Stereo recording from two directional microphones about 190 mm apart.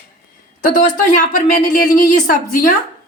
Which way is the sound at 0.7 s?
45° left (ahead or behind).